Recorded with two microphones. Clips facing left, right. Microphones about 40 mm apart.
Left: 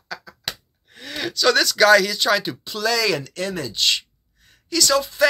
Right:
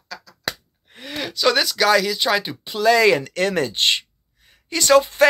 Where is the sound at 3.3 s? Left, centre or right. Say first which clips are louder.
Right 6 dB; right.